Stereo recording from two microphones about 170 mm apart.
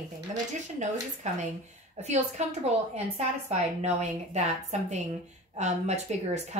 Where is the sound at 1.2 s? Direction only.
45° right (ahead or behind).